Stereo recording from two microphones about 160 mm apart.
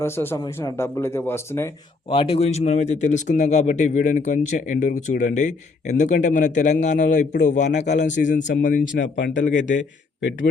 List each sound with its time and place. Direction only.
0.0 s speech: 15° left (ahead or behind)
2.0 s speech: 35° left (ahead or behind); by 8.9 s 55° left (ahead or behind)
9.0 s speech: 90° left
9.3 s speech: 55° left (ahead or behind)